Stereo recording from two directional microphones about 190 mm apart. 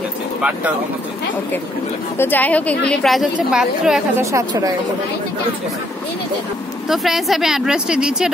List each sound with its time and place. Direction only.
2.1 s a woman's voice: 10° left (ahead or behind)
4.2 s speech: 15° right (ahead or behind)
6.9 s speech: centre (ahead or behind)